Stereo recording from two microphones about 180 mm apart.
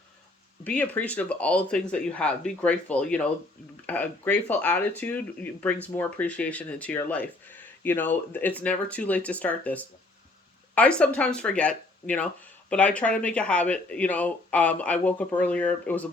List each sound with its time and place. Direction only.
0.6 s speech: 5° left (ahead or behind)